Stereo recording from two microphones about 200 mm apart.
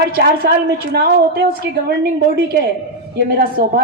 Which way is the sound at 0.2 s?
50° right (ahead or behind).